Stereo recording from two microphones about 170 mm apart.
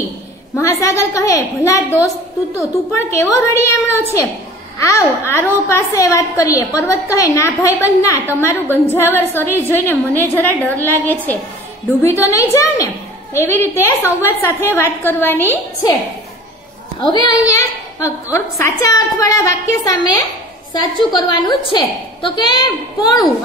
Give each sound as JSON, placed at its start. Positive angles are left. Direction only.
{"t": 0.6, "sound": "a woman's voice", "side_deg": 20}
{"t": 17.0, "sound": "a woman's voice", "side_deg": 25}